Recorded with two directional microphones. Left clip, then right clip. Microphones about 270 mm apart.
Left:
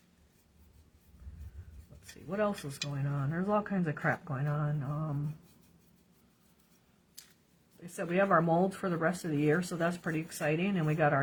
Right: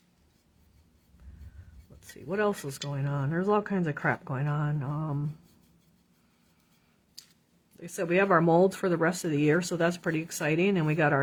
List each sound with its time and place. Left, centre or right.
2.9 s speech: right
7.8 s speech: right